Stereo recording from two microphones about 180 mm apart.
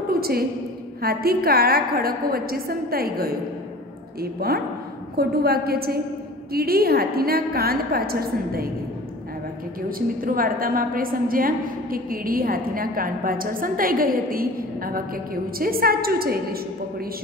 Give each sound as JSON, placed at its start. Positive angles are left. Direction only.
{"t": 0.1, "sound": "a woman's voice", "side_deg": -55}
{"t": 9.8, "sound": "a woman's voice", "side_deg": -50}